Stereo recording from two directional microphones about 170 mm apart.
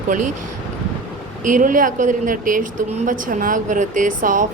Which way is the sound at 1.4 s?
50° right (ahead or behind).